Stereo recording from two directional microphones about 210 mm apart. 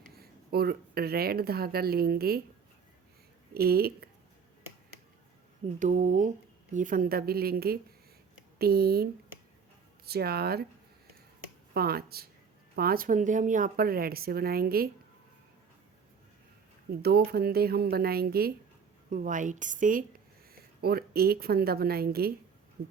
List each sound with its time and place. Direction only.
0.2 s speech: 50° right (ahead or behind)
3.5 s speech: 45° right (ahead or behind)
5.6 s a woman's voice: 35° right (ahead or behind)
10.1 s speech: 50° right (ahead or behind)
11.7 s speech: 45° right (ahead or behind)
16.9 s a woman's voice: 50° right (ahead or behind)